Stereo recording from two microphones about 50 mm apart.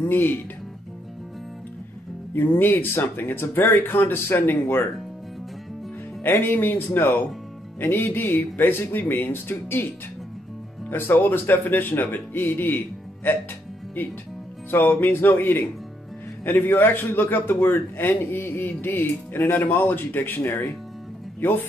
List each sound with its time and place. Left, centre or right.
0.1 s a man's voice: left
2.3 s a man's voice: left
6.2 s a man's voice: left
10.9 s a man's voice: left
14.7 s a man's voice: left